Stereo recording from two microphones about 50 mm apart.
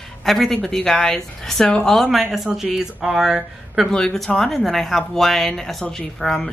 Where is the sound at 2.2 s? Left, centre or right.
Centre.